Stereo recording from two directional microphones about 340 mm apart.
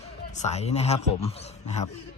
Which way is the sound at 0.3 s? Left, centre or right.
Centre.